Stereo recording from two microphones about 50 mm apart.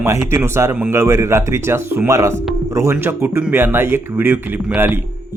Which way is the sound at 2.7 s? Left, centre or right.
Right.